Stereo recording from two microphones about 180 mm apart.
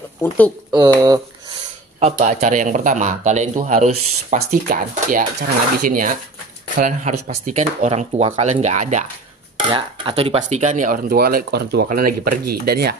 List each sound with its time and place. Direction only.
0.7 s speech: 20° right (ahead or behind)
2.0 s a man's voice: 40° right (ahead or behind)
9.7 s a man's voice: 25° right (ahead or behind); by 12.9 s 60° right (ahead or behind)